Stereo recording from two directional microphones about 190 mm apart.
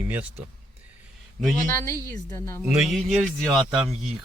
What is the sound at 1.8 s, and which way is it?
Speech, 15° left (ahead or behind).